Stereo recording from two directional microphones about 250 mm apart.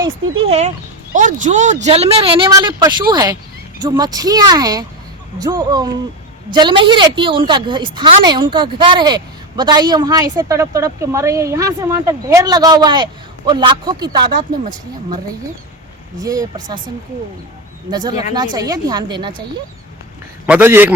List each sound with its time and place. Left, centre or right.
0.0 s a woman's voice: right
14.3 s speech: right
16.2 s a woman's voice: centre
17.9 s a woman's voice: centre
20.5 s a woman's voice: centre